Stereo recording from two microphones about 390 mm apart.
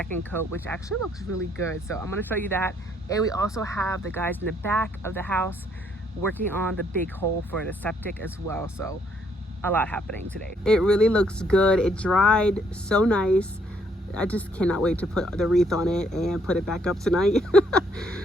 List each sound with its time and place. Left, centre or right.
0.3 s speech: centre